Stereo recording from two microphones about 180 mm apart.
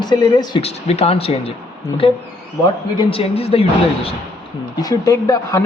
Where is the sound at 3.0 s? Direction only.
30° left (ahead or behind).